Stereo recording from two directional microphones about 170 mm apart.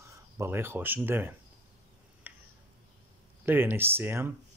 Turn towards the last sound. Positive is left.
turn(degrees=-15)  # may be behind; listen again after turning